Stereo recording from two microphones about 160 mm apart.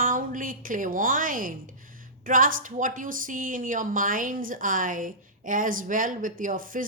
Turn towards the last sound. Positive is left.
turn(degrees=-55)  # may be behind; listen again after turning